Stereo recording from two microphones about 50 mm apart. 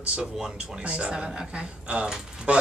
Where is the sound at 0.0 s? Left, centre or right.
Centre.